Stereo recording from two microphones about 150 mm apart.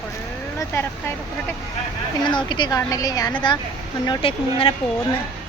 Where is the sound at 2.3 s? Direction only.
30° left (ahead or behind).